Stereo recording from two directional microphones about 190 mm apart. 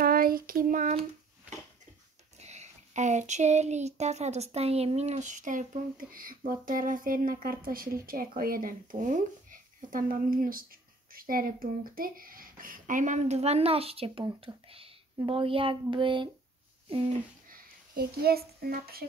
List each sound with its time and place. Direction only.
0.0 s child singing: 50° right (ahead or behind)
2.3 s a sound: 35° right (ahead or behind)
6.6 s speech: 45° right (ahead or behind); by 16.3 s 25° right (ahead or behind)
17.5 s a child's voice: 50° right (ahead or behind)